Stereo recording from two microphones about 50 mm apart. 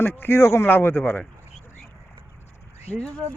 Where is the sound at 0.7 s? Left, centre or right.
Left.